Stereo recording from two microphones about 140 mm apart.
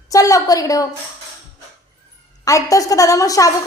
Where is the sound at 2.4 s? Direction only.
25° left (ahead or behind).